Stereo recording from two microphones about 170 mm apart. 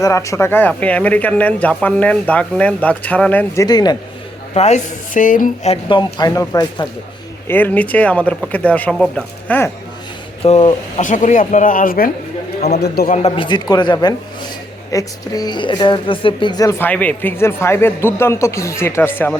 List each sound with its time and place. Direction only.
0.0 s a woman's voice: 20° left (ahead or behind)
4.5 s speech: 40° left (ahead or behind)
5.7 s a woman's voice: 25° left (ahead or behind); by 9.7 s 10° left (ahead or behind)
10.4 s a man's voice: 35° left (ahead or behind); by 13.1 s 65° left (ahead or behind)
13.2 s a woman's voice: 30° left (ahead or behind); by 19.4 s 15° left (ahead or behind)